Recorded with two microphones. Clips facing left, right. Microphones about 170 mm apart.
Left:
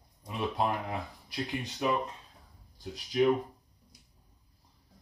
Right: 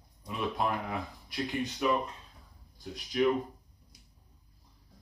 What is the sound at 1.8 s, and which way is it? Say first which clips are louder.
Speech: right 1 dB; 30° left (ahead or behind).